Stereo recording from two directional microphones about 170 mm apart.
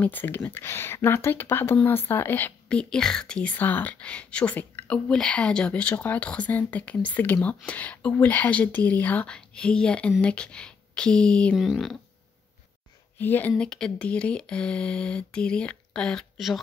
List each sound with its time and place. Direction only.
0.0 s speech: 10° left (ahead or behind)
13.2 s speech: 10° left (ahead or behind)